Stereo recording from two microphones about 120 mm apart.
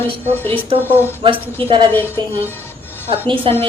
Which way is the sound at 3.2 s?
45° right (ahead or behind).